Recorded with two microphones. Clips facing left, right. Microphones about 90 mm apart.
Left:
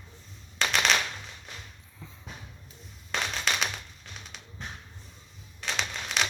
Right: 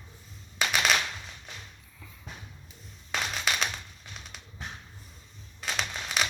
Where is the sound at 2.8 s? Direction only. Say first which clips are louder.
Left 1 dB; centre (ahead or behind).